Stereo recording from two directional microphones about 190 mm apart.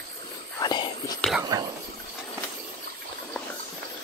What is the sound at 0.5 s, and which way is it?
Whispering, 20° left (ahead or behind).